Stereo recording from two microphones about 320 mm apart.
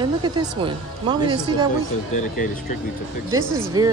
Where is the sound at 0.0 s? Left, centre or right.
Centre.